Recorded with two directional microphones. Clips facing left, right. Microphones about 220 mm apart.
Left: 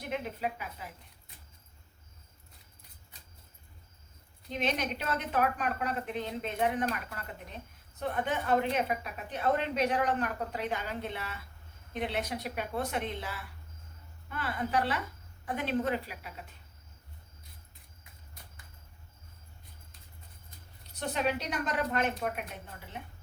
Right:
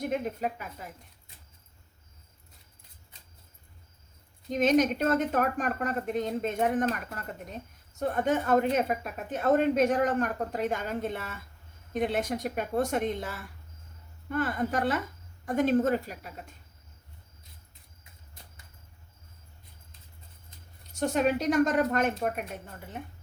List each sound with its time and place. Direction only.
0.0 s a woman's voice: 45° right (ahead or behind)
4.4 s a woman's voice: 45° right (ahead or behind)
20.9 s a woman's voice: 45° right (ahead or behind)